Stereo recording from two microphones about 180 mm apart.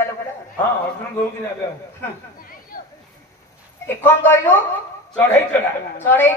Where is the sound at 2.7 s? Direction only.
50° left (ahead or behind).